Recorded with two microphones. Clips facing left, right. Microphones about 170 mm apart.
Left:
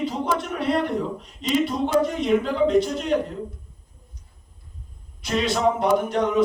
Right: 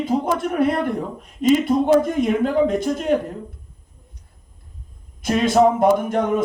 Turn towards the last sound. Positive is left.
turn(degrees=-50)  # may be behind; listen again after turning